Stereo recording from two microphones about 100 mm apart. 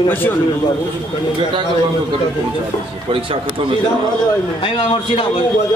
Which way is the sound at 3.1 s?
65° right (ahead or behind).